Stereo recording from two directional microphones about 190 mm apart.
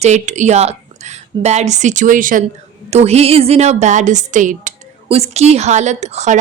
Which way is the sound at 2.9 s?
35° right (ahead or behind).